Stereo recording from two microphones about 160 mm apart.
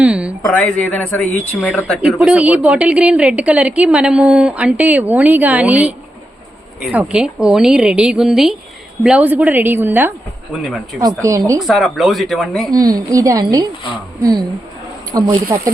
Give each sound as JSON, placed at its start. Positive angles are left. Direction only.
{"t": 0.0, "sound": "a sound", "side_deg": -5}
{"t": 0.5, "sound": "speech", "side_deg": 10}
{"t": 2.0, "sound": "a woman's voice", "side_deg": -5}
{"t": 11.6, "sound": "speech", "side_deg": 0}
{"t": 12.7, "sound": "a woman's voice", "side_deg": -25}